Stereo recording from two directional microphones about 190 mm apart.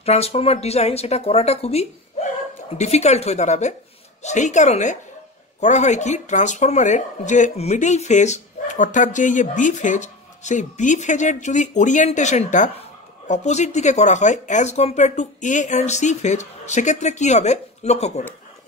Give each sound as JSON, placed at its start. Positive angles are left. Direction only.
{"t": 0.0, "sound": "speech", "side_deg": 35}